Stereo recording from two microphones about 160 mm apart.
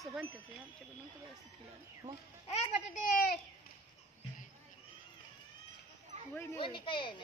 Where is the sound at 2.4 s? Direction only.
40° left (ahead or behind).